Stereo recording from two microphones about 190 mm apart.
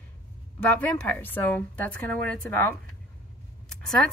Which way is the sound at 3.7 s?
5° left (ahead or behind).